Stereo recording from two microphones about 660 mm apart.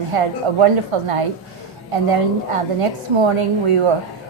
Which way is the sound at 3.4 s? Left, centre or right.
Right.